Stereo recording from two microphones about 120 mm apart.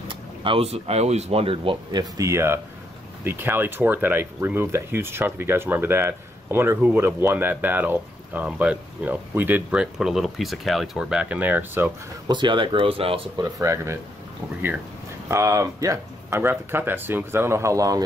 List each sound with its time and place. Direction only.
0.1 s speech: 45° right (ahead or behind)
1.9 s speech: 30° right (ahead or behind); by 11.9 s 15° right (ahead or behind)
12.3 s speech: 40° right (ahead or behind)
13.4 s speech: 25° right (ahead or behind)
15.2 s speech: 25° right (ahead or behind)